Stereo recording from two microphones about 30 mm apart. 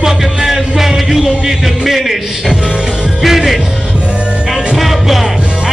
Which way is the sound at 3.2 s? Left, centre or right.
Centre.